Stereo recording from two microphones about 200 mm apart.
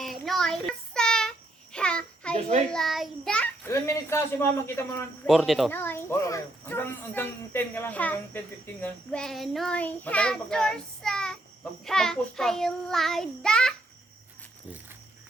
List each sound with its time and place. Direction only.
0.0 s child singing: centre (ahead or behind)
2.3 s a child's voice: 35° right (ahead or behind)
2.6 s speech: centre (ahead or behind)
5.3 s speech: centre (ahead or behind)
11.9 s child singing: 5° left (ahead or behind)